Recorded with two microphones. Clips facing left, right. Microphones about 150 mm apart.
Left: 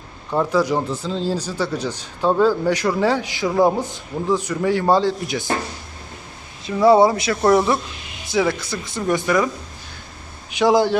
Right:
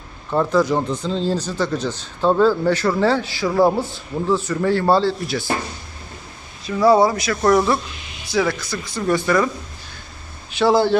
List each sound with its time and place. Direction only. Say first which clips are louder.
0.3 s a man's voice: right 1 dB; 10° left (ahead or behind)
6.7 s speech: left 1 dB; 20° left (ahead or behind)
10.5 s a man's voice: even; 15° left (ahead or behind)